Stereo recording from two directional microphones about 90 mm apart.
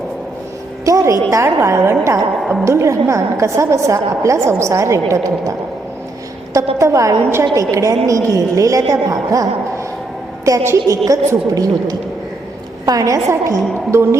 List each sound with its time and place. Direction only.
0.9 s a woman's voice: 40° right (ahead or behind)
2.4 s a woman's voice: centre (ahead or behind)
2.6 s a woman's voice: 35° right (ahead or behind)
6.7 s a woman's voice: 35° right (ahead or behind)